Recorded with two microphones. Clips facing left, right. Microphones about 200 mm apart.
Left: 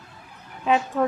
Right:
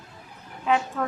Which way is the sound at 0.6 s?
20° left (ahead or behind).